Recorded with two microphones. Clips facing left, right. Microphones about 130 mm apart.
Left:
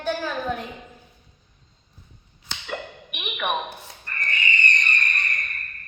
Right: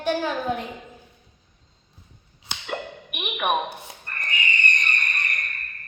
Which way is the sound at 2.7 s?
15° right (ahead or behind).